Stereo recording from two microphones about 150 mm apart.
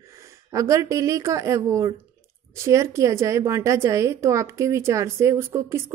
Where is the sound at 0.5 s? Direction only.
20° right (ahead or behind).